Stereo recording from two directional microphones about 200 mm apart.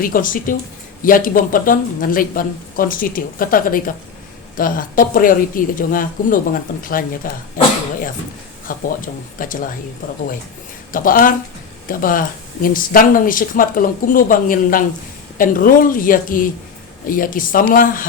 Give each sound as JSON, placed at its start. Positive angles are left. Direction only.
{"t": 0.0, "sound": "speech", "side_deg": 45}
{"t": 8.6, "sound": "speech", "side_deg": 45}
{"t": 10.9, "sound": "speech", "side_deg": 45}